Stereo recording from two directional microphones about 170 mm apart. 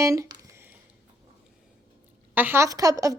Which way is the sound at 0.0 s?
20° right (ahead or behind).